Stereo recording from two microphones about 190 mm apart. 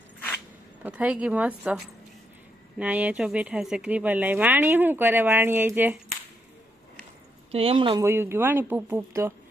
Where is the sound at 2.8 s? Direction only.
5° right (ahead or behind).